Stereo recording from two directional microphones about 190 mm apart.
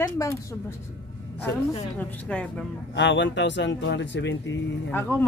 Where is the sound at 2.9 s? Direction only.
70° left (ahead or behind).